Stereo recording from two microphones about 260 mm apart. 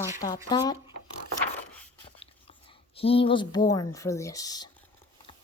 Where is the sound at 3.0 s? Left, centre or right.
Left.